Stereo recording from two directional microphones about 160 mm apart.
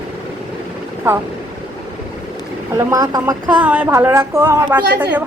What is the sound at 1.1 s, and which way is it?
Speech, 10° right (ahead or behind).